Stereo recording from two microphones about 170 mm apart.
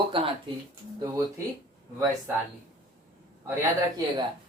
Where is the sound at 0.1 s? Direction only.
30° right (ahead or behind).